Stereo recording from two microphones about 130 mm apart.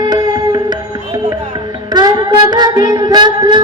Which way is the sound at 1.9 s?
30° right (ahead or behind).